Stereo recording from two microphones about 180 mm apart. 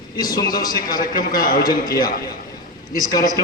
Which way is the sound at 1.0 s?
50° left (ahead or behind).